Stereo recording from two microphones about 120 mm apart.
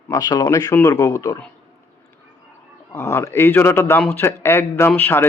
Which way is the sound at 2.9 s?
20° left (ahead or behind).